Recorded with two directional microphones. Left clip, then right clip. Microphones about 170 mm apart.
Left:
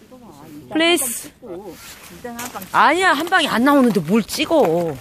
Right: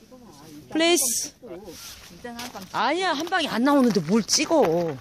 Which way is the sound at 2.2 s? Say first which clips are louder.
Left 6 dB; centre (ahead or behind).